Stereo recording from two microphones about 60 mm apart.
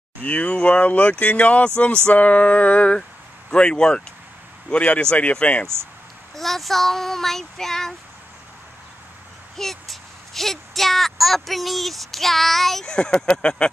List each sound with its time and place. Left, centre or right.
0.2 s speech: left
6.3 s child singing: centre
9.6 s speech: centre